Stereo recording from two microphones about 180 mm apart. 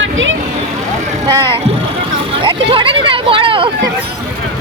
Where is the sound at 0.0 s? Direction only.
90° right.